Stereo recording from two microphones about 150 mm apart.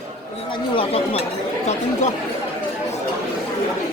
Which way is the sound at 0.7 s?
40° left (ahead or behind).